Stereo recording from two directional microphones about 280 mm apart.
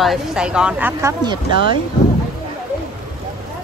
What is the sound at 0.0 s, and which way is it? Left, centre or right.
Speech, centre.